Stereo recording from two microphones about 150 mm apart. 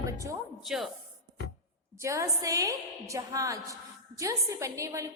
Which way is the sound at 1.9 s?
20° right (ahead or behind).